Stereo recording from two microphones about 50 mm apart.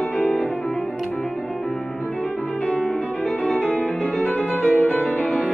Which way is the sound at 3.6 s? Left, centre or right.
Left.